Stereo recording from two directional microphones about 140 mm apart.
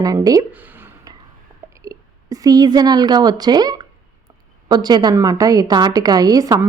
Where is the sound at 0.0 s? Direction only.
25° right (ahead or behind).